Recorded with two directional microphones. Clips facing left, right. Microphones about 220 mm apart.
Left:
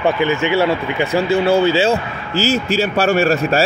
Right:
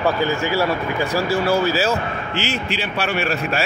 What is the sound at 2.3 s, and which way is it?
A man's voice, 40° left (ahead or behind).